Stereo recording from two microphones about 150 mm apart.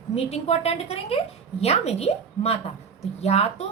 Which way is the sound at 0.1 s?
45° left (ahead or behind).